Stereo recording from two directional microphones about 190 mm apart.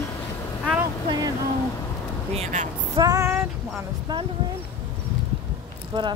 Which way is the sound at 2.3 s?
35° right (ahead or behind).